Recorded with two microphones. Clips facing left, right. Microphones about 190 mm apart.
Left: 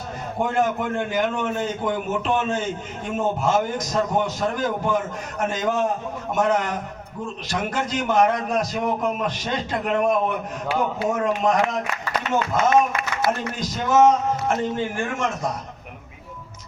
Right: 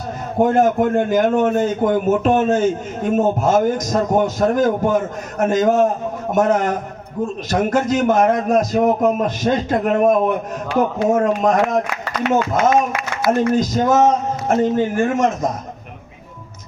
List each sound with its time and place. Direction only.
0.3 s a man's voice: 45° right (ahead or behind)
12.2 s speech: 60° right (ahead or behind)
13.4 s a man's voice: 50° right (ahead or behind)